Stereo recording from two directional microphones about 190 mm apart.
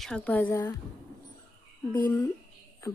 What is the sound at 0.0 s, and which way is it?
Speech, 5° left (ahead or behind).